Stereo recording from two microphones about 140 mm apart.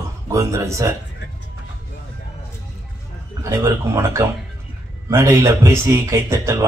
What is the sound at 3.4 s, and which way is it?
Speech, 20° right (ahead or behind).